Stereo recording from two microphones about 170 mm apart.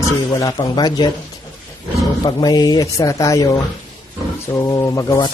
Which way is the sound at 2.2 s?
25° left (ahead or behind).